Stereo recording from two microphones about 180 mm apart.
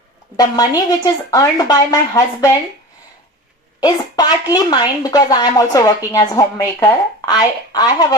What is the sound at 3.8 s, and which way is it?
A woman's voice, 20° left (ahead or behind).